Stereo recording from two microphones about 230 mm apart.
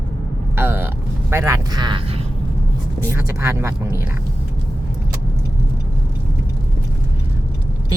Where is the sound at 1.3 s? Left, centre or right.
Centre.